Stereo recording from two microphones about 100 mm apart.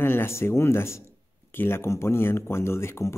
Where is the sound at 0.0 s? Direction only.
20° left (ahead or behind).